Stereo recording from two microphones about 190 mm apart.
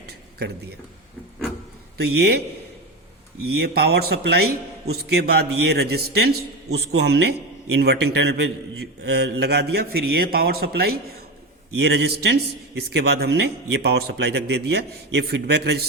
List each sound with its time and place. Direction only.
2.0 s a man's voice: 60° right (ahead or behind)
3.4 s a man's voice: 55° right (ahead or behind)